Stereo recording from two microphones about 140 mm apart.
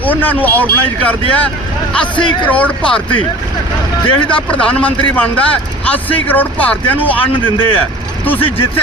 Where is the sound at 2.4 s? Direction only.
10° left (ahead or behind).